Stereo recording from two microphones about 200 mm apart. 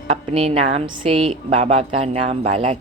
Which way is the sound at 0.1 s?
30° right (ahead or behind).